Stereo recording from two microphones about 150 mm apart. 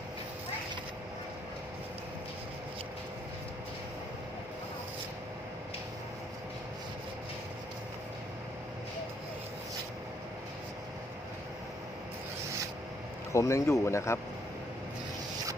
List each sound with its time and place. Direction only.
13.3 s speech: 20° left (ahead or behind)